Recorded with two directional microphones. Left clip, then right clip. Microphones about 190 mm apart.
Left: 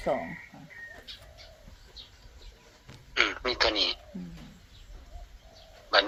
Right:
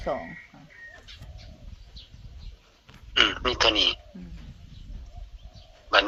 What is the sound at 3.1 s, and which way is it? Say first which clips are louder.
Speech: right 5 dB; 25° right (ahead or behind).